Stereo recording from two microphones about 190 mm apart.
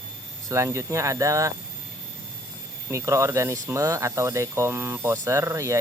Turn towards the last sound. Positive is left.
turn(degrees=-15)  # may be behind; listen again after turning